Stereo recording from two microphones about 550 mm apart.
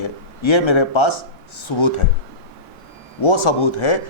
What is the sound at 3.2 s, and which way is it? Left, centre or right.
Speech, left.